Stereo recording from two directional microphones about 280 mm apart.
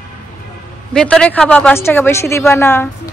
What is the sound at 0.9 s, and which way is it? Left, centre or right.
A woman's voice, centre.